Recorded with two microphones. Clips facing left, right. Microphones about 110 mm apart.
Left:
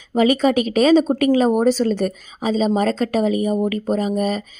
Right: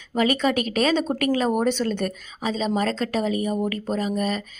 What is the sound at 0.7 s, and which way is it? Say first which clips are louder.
Speech: left 7 dB; 35° left (ahead or behind).